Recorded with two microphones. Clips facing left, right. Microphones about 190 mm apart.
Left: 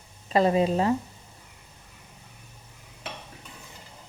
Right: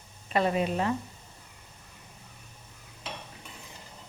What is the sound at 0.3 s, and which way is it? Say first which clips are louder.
Speech: left 5 dB; 35° left (ahead or behind).